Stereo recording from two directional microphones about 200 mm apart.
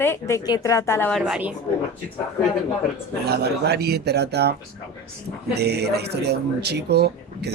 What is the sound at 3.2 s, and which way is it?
Speech, 55° right (ahead or behind).